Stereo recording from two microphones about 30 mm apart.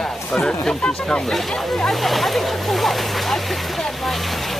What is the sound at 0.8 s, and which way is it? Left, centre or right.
Speech, left.